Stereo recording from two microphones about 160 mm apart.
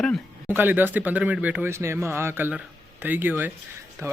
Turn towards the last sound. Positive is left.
turn(degrees=-15)  # may be behind; listen again after turning